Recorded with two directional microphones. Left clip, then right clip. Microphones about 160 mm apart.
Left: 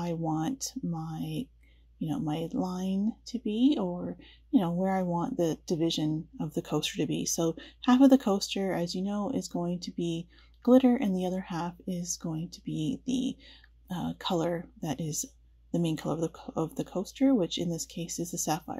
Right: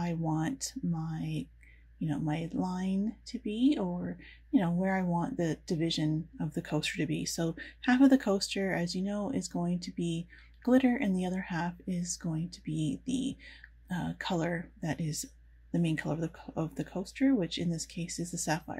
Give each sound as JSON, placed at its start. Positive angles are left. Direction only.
{"t": 0.3, "sound": "speech", "side_deg": 25}